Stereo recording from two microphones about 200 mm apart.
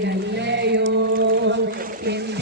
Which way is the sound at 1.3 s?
55° right (ahead or behind).